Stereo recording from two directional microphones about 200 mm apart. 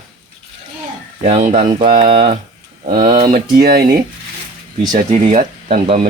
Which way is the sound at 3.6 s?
45° right (ahead or behind).